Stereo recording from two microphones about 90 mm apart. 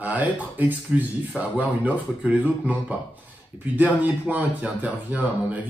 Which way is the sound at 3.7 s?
15° right (ahead or behind).